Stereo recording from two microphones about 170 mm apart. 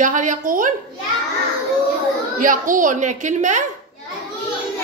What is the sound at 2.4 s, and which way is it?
A woman's voice, 50° right (ahead or behind).